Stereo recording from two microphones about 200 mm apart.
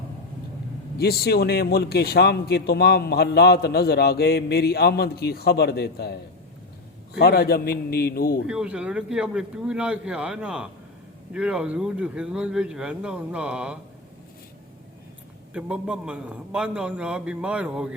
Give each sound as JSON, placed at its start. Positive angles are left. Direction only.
{"t": 0.9, "sound": "a man's voice", "side_deg": 50}
{"t": 7.2, "sound": "a man's voice", "side_deg": 50}
{"t": 8.4, "sound": "a man's voice", "side_deg": -5}
{"t": 15.5, "sound": "a man's voice", "side_deg": -5}